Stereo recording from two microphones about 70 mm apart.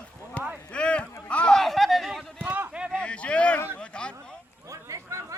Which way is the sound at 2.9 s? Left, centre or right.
Centre.